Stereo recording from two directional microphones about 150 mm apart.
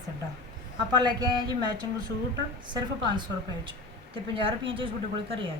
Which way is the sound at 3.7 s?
35° right (ahead or behind).